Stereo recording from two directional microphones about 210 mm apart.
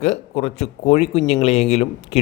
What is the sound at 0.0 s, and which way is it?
A man's voice, 30° left (ahead or behind).